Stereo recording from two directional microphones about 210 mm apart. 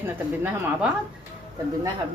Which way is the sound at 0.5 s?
10° right (ahead or behind).